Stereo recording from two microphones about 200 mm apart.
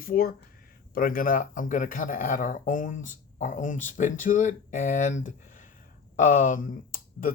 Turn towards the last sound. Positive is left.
turn(degrees=40)  # may be behind; listen again after turning